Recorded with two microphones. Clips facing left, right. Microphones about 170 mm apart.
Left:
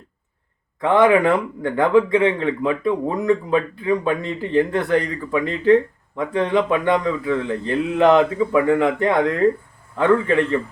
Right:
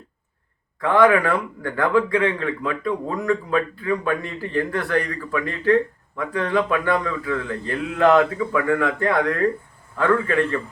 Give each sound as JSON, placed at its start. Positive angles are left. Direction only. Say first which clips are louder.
{"t": 0.8, "sound": "speech", "louder": "left 2 dB", "side_deg": 20}